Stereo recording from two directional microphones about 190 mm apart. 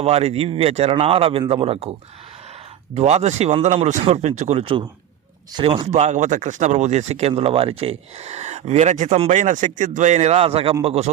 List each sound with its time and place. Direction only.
0.0 s speech: 35° right (ahead or behind)
2.9 s speech: 35° right (ahead or behind)